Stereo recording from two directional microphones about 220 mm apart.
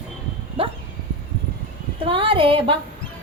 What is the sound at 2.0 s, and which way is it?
Speech, 25° right (ahead or behind).